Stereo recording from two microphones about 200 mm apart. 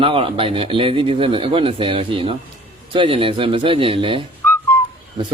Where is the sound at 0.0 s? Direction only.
25° right (ahead or behind).